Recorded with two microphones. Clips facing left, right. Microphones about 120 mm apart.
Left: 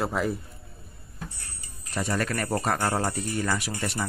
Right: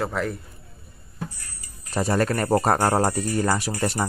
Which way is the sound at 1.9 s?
40° right (ahead or behind).